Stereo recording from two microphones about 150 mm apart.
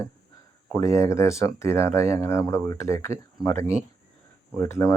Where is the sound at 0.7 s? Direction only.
20° left (ahead or behind).